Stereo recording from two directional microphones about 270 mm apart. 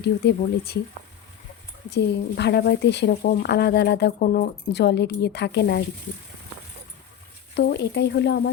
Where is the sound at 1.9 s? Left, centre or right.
Left.